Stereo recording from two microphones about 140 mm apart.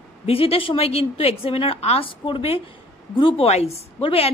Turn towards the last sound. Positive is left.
turn(degrees=45)  # may be behind; listen again after turning